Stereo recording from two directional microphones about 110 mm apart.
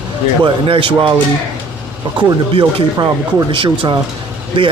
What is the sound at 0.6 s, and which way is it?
Speech, 55° right (ahead or behind).